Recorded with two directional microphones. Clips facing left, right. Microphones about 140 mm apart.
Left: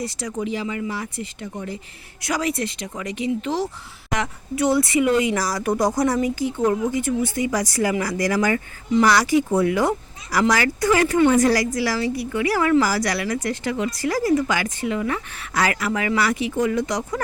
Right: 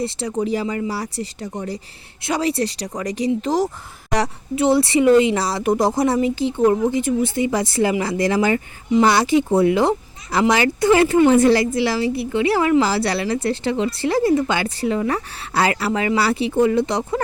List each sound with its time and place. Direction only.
0.0 s a woman's voice: 30° right (ahead or behind)